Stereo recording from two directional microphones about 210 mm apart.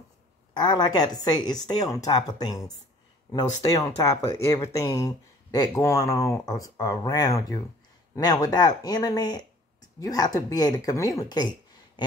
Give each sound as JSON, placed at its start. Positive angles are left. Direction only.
{"t": 0.6, "sound": "a woman's voice", "side_deg": 20}